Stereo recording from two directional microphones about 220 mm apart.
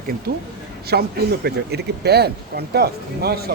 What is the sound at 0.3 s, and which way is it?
Speech, 45° right (ahead or behind).